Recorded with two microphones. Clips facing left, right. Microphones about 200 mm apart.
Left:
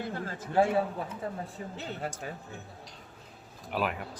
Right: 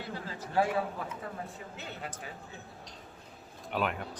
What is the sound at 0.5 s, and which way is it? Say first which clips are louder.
A man's voice: left 4 dB; 25° left (ahead or behind).